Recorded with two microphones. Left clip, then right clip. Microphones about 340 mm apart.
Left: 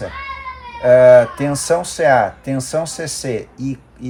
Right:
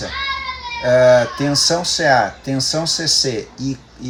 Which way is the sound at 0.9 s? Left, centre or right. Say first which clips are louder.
Left 4 dB; left.